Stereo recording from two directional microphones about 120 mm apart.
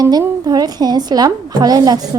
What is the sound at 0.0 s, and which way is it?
Speech, 35° right (ahead or behind).